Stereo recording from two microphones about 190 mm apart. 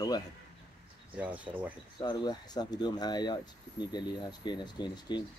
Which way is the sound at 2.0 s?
20° left (ahead or behind).